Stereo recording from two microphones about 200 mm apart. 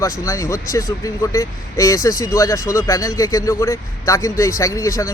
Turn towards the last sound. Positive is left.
turn(degrees=15)  # may be behind; listen again after turning